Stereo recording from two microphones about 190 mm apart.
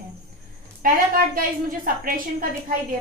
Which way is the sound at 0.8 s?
45° right (ahead or behind).